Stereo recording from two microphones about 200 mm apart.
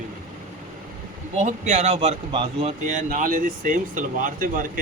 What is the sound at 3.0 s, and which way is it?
Speech, 45° right (ahead or behind).